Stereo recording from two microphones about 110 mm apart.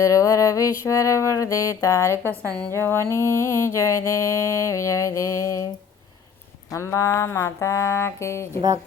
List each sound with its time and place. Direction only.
0.0 s mantra: 30° left (ahead or behind)
6.7 s mantra: 25° left (ahead or behind)